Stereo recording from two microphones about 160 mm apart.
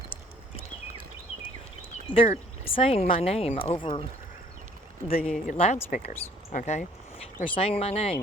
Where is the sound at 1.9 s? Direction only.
35° left (ahead or behind).